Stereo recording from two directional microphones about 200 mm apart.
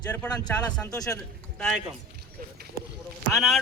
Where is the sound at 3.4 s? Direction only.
Centre (ahead or behind).